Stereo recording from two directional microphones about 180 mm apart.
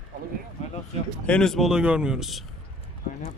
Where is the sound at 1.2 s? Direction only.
5° left (ahead or behind).